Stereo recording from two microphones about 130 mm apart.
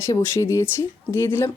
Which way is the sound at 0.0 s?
20° left (ahead or behind).